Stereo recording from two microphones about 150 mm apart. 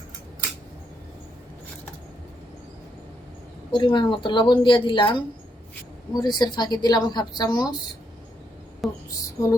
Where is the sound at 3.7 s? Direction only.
35° left (ahead or behind).